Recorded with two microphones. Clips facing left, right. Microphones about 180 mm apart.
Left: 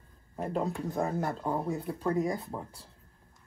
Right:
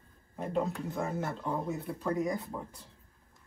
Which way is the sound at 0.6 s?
35° left (ahead or behind).